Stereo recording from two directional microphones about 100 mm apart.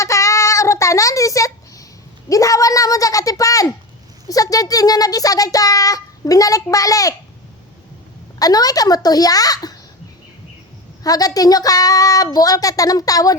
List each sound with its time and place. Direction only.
0.0 s a sound: 30° left (ahead or behind)
4.3 s a child's voice: 35° left (ahead or behind)
8.4 s a woman's voice: 40° left (ahead or behind)
11.0 s a woman's voice: 40° left (ahead or behind)